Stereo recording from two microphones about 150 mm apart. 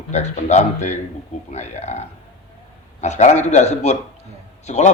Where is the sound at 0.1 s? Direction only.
50° left (ahead or behind).